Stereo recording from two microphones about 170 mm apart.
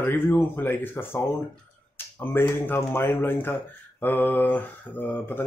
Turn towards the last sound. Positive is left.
turn(degrees=10)  # may be behind; listen again after turning